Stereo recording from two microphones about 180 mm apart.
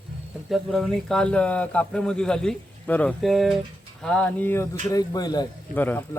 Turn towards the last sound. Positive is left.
turn(degrees=10)  # may be behind; listen again after turning